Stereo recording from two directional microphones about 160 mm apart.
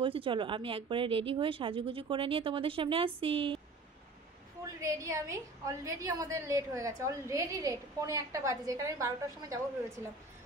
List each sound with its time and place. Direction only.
0.0 s speech: 35° right (ahead or behind)
4.7 s a woman's voice: 20° right (ahead or behind)